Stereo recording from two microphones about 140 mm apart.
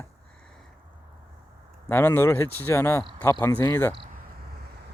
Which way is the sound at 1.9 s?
15° left (ahead or behind).